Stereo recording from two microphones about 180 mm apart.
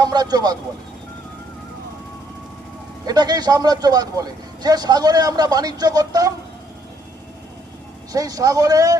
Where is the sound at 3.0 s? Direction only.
20° right (ahead or behind).